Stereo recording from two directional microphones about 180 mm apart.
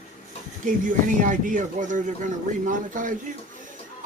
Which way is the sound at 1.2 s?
45° right (ahead or behind).